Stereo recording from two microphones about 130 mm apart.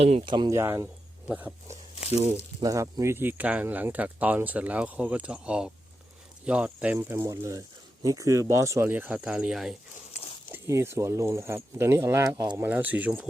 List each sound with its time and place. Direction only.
0.0 s speech: 55° right (ahead or behind)
0.3 s speech: 35° right (ahead or behind)
0.5 s speech: 20° right (ahead or behind)
1.3 s speech: 10° right (ahead or behind)
2.6 s speech: 30° right (ahead or behind); by 9.7 s centre (ahead or behind)
10.1 s a sound: 55° left (ahead or behind)
10.5 s speech: 20° right (ahead or behind)
12.6 s speech: 15° right (ahead or behind)